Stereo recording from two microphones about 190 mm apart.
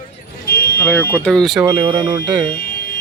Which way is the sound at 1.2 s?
Centre (ahead or behind).